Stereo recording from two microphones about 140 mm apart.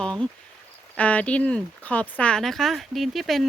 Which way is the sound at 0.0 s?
5° left (ahead or behind).